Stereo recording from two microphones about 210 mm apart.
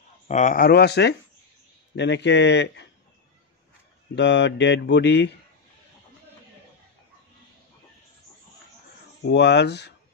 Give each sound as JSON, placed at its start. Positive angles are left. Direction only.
{"t": 0.3, "sound": "speech", "side_deg": 35}
{"t": 4.1, "sound": "speech", "side_deg": 55}
{"t": 9.2, "sound": "speech", "side_deg": 55}